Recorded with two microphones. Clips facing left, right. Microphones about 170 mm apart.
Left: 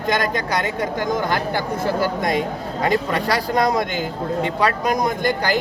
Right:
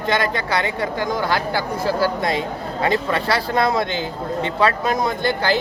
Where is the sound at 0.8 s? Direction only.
20° left (ahead or behind).